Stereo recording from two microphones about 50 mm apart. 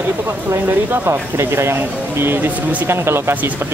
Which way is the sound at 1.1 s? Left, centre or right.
Right.